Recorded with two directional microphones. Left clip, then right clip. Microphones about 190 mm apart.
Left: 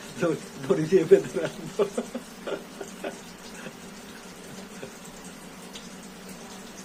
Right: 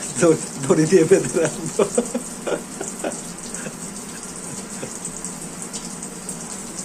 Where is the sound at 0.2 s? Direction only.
5° right (ahead or behind).